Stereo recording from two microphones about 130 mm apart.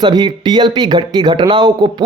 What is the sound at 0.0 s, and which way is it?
Speech, 35° right (ahead or behind).